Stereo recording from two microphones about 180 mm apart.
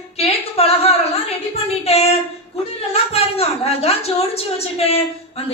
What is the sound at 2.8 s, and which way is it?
A woman's voice, 35° left (ahead or behind).